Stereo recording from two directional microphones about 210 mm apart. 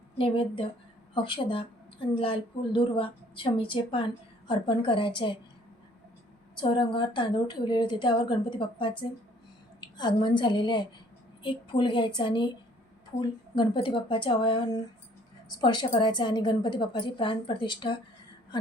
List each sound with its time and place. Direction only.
0.2 s a woman's voice: 25° left (ahead or behind)
6.6 s a woman's voice: 25° left (ahead or behind)
13.6 s a woman's voice: 25° left (ahead or behind)